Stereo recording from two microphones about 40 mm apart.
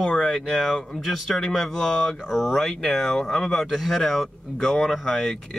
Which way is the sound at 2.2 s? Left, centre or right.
Centre.